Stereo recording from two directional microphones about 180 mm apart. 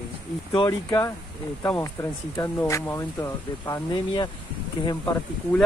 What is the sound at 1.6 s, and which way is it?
Speech, 15° left (ahead or behind).